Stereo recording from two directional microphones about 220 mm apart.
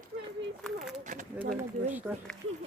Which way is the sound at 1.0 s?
35° right (ahead or behind).